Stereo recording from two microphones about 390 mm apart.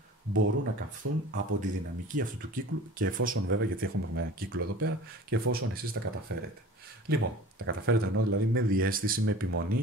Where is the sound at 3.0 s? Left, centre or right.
Right.